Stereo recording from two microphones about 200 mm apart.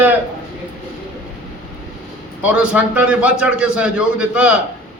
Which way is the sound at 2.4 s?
5° right (ahead or behind).